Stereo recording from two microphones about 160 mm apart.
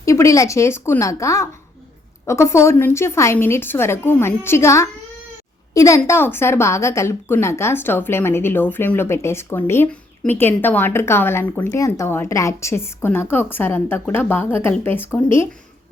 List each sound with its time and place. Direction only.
0.0 s a woman's voice: 20° left (ahead or behind)